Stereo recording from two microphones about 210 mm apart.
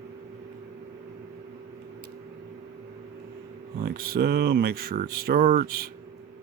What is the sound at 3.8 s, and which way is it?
Speech, 45° right (ahead or behind).